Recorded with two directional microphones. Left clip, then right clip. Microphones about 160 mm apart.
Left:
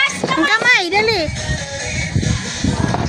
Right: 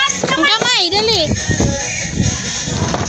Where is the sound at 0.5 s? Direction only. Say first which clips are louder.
Left 2 dB; 60° right (ahead or behind).